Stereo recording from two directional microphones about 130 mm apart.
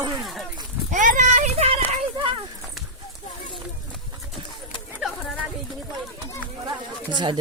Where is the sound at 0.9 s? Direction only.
80° right; by 1.7 s 55° right (ahead or behind).